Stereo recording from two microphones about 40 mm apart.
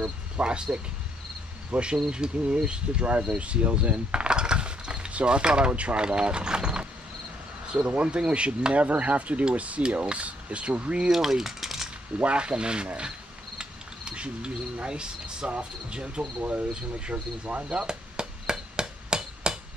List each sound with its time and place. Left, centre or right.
0.4 s speech: right
5.9 s speech: right
7.6 s a sound: right
7.9 s speech: right
11.1 s cutlery: centre
12.2 s speech: right
16.4 s hammer: right